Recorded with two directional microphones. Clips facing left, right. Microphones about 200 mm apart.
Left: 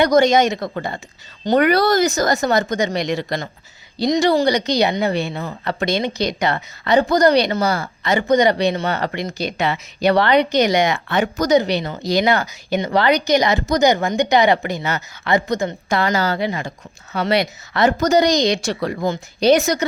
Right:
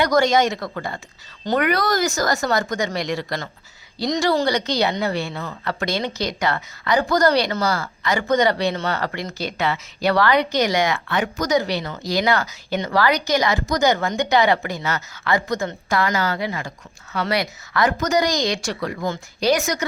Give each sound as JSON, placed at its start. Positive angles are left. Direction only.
{"t": 0.0, "sound": "a woman's voice", "side_deg": 20}
{"t": 19.0, "sound": "a woman's voice", "side_deg": 20}